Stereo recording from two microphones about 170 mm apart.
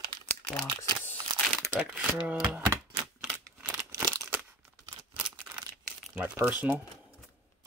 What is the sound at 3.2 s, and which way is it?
Typewriter, 10° right (ahead or behind).